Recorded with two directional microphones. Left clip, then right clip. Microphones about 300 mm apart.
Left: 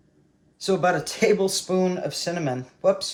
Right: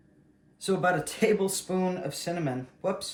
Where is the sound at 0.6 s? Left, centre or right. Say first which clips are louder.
Left 5 dB; left.